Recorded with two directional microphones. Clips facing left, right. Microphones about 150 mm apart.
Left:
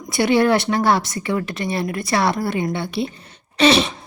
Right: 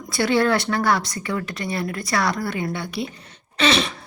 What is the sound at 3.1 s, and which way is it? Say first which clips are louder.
Throat clearing: left 3 dB; 30° left (ahead or behind).